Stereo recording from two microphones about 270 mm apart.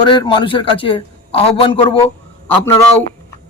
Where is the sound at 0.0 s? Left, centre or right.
Centre.